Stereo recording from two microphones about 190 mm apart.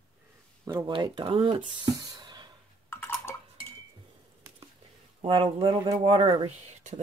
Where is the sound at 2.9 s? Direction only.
10° left (ahead or behind).